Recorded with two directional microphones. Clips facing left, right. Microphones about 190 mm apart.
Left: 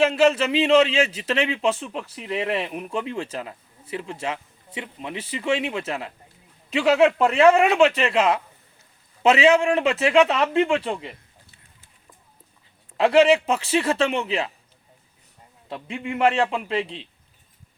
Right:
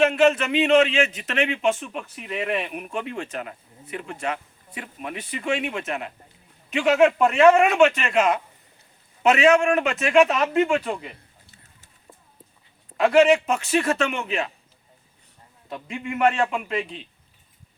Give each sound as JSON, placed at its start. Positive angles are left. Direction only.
{"t": 0.0, "sound": "a man's voice", "side_deg": 30}
{"t": 13.0, "sound": "a man's voice", "side_deg": 30}
{"t": 15.7, "sound": "a man's voice", "side_deg": 30}